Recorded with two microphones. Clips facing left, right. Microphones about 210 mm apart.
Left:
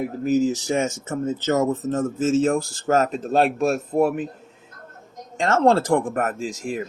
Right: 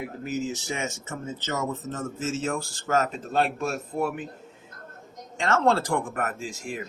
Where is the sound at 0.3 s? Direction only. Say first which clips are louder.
Left 10 dB; 40° left (ahead or behind).